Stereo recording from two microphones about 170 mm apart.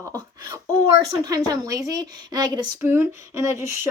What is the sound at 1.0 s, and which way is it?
A woman's voice, 20° right (ahead or behind).